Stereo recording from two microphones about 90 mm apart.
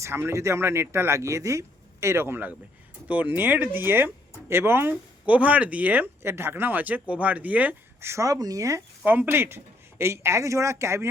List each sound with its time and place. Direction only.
0.0 s speech: 30° right (ahead or behind)
5.2 s speech: 15° right (ahead or behind)
8.0 s speech: 35° right (ahead or behind)
9.0 s speech: 20° right (ahead or behind)